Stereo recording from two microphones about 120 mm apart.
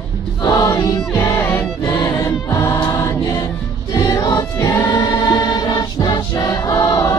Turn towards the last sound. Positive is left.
turn(degrees=30)  # may be behind; listen again after turning